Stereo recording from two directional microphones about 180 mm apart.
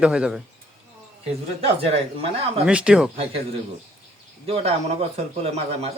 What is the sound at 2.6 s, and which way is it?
Speech, 5° right (ahead or behind).